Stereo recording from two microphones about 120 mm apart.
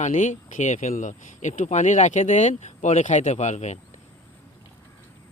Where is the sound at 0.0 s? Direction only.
90° left; by 3.8 s 75° left (ahead or behind).